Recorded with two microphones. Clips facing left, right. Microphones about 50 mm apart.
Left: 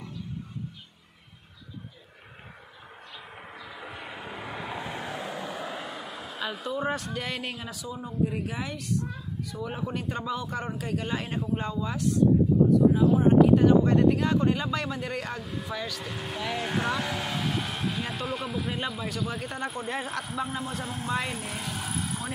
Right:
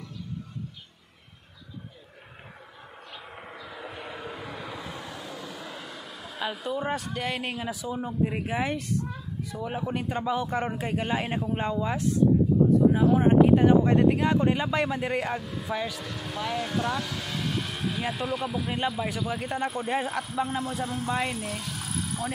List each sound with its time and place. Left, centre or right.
3.8 s vehicle: centre
4.4 s vehicle: left
6.0 s vehicle: centre
6.4 s speech: centre
7.8 s speech: right
9.7 s a man's voice: centre; by 12.2 s right
12.9 s a sound: right
13.3 s speech: right
16.1 s speech: left
17.4 s vehicle: centre
18.0 s speech: centre
20.6 s speech: left